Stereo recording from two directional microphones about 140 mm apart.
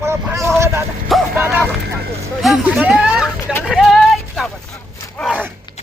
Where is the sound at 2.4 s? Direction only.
5° right (ahead or behind).